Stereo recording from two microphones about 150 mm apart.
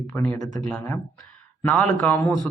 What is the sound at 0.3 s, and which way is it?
Speech, 25° left (ahead or behind).